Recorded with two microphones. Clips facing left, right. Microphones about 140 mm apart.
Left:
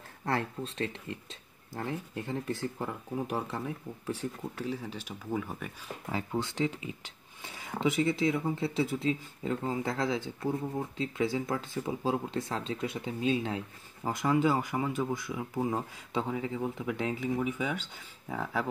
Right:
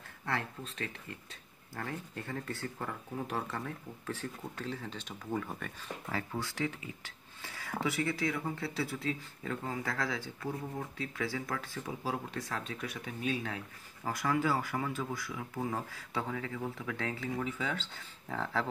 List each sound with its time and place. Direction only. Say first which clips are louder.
0.2 s speech: left 5 dB; 35° left (ahead or behind); by 5.7 s 5° left (ahead or behind)
6.0 s speech: left 5 dB; 20° left (ahead or behind)